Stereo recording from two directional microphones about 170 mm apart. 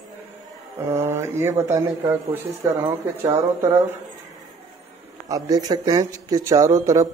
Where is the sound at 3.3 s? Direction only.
15° right (ahead or behind).